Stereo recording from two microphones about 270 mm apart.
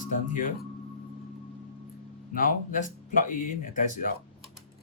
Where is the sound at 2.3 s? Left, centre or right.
Left.